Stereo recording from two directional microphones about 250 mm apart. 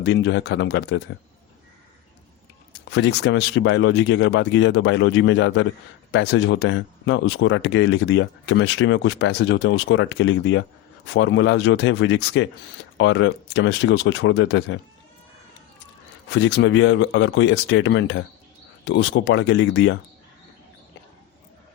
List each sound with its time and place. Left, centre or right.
0.0 s speech: left
2.9 s speech: left
16.3 s speech: left